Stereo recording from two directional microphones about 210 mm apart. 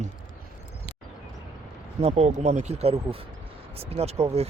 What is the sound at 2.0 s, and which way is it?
Speech, 30° right (ahead or behind).